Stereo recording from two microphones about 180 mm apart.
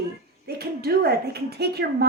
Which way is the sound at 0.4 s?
60° right (ahead or behind).